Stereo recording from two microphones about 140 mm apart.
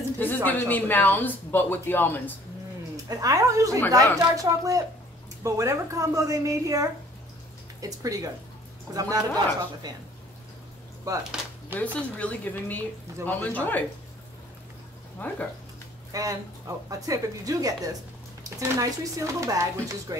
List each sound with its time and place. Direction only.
0.2 s speech: 10° left (ahead or behind)
3.1 s speech: 25° right (ahead or behind)
11.1 s speech: 25° right (ahead or behind)
11.8 s speech: 10° left (ahead or behind)
15.1 s speech: 15° left (ahead or behind)
16.1 s speech: 25° right (ahead or behind)